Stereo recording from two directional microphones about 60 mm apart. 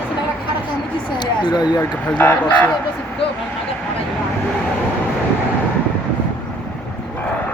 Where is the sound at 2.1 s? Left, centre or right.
Left.